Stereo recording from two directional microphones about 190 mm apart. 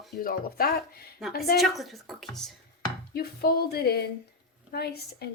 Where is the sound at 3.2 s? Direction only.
55° left (ahead or behind).